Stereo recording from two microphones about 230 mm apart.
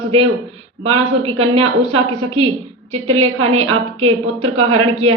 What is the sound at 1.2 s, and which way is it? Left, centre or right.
Speech, right.